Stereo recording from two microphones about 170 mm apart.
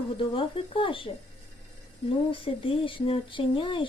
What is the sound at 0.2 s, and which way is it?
Speech, 30° left (ahead or behind).